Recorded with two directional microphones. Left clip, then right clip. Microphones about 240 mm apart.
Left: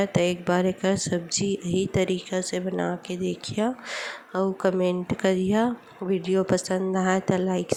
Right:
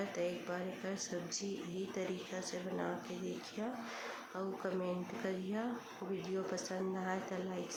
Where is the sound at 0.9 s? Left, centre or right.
Left.